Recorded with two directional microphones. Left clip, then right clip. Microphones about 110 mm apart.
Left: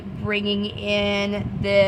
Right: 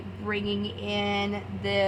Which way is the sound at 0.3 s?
55° left (ahead or behind).